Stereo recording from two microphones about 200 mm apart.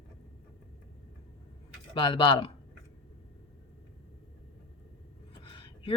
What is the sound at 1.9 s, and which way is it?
Speech, 20° left (ahead or behind).